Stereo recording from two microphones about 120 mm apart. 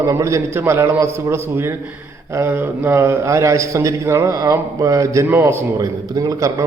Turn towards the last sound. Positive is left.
turn(degrees=-30)  # may be behind; listen again after turning